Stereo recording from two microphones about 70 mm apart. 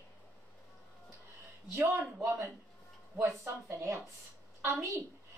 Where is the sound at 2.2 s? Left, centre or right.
Right.